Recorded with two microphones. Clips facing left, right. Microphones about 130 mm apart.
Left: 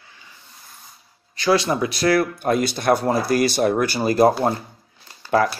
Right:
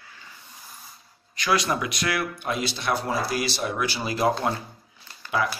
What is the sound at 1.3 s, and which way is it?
Speech, 30° left (ahead or behind).